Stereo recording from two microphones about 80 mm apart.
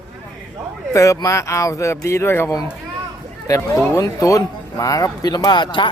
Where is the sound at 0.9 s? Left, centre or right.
Left.